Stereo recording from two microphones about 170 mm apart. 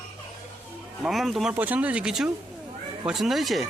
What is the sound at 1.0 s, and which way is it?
Speech, centre (ahead or behind).